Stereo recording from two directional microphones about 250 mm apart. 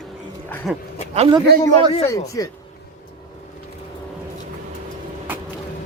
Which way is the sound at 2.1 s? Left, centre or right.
Centre.